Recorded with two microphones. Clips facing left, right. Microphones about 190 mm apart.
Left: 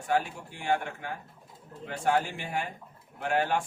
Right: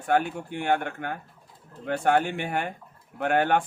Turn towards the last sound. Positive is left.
turn(degrees=-60)  # may be behind; listen again after turning